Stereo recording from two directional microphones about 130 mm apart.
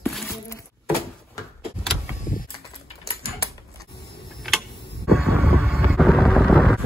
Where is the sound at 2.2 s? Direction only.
90° left.